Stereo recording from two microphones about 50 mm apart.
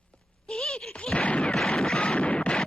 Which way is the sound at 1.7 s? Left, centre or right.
Centre.